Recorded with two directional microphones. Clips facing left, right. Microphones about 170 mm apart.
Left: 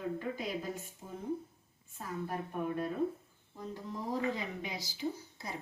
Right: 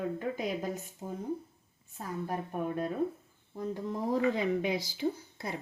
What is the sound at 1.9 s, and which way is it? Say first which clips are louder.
Speech: right 3 dB; 40° right (ahead or behind).